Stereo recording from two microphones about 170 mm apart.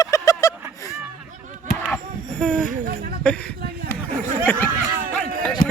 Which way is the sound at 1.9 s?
5° left (ahead or behind).